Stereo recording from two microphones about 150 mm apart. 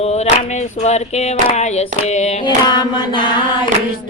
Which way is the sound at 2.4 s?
30° left (ahead or behind).